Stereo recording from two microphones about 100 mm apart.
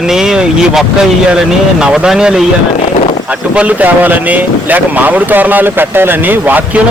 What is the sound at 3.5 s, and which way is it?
A man's voice, 15° right (ahead or behind).